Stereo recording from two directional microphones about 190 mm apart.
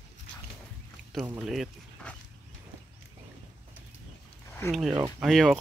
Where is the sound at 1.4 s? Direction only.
Centre (ahead or behind).